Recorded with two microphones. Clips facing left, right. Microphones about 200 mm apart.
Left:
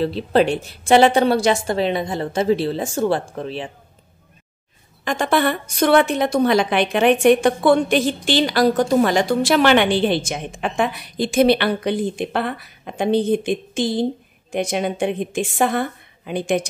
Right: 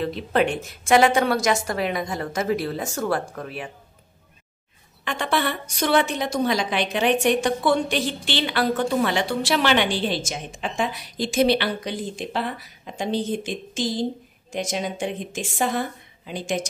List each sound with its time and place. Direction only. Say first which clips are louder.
0.0 s a woman's voice: left 5 dB; 30° left (ahead or behind)
5.0 s a woman's voice: left 6 dB; 45° left (ahead or behind)